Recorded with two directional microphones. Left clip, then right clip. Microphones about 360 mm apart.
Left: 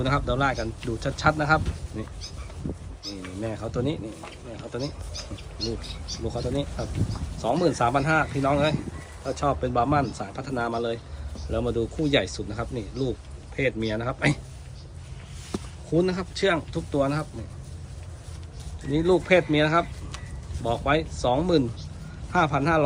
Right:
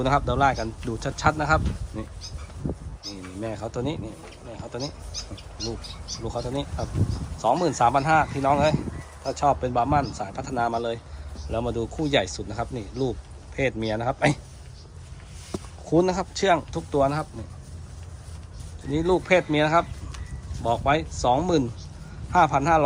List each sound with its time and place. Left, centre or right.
0.0 s speech: centre
3.4 s speech: centre
6.2 s speech: centre
15.5 s a sound: centre
16.0 s speech: centre
18.9 s speech: centre